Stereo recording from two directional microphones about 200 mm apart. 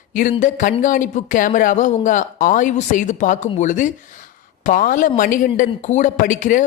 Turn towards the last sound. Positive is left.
turn(degrees=40)  # may be behind; listen again after turning